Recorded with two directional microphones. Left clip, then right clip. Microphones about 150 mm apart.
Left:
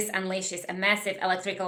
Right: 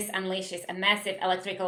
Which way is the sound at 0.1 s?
30° left (ahead or behind).